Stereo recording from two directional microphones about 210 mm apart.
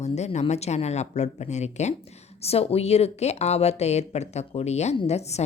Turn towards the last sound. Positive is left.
turn(degrees=30)  # may be behind; listen again after turning